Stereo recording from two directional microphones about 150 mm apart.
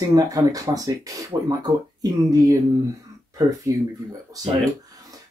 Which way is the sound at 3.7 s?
20° right (ahead or behind).